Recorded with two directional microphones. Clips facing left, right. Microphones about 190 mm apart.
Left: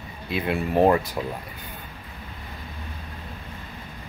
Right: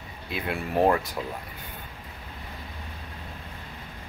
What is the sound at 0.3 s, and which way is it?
Speech, centre (ahead or behind).